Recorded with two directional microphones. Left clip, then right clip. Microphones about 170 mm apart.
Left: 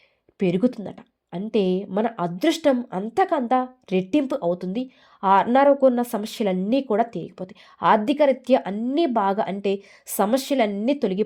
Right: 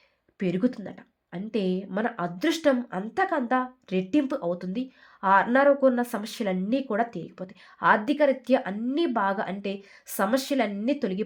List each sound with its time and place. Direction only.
0.3 s a woman's voice: 35° left (ahead or behind)